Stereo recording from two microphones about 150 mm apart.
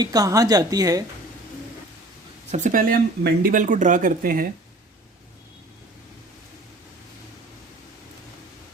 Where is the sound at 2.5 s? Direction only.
60° right (ahead or behind).